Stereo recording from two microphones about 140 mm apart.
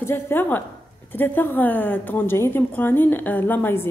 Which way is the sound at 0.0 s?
15° left (ahead or behind).